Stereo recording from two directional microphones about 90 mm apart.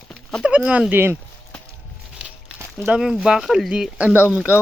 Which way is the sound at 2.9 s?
10° right (ahead or behind).